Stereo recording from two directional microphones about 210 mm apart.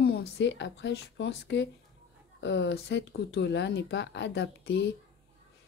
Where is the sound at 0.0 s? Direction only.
50° left (ahead or behind).